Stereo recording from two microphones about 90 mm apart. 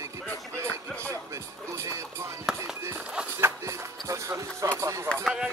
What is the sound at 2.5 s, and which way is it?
Speech, 5° right (ahead or behind).